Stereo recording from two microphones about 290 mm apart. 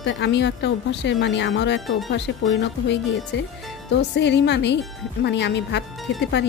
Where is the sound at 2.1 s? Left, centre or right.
Left.